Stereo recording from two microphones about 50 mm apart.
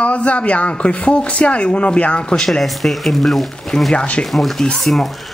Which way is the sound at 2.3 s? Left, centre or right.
Centre.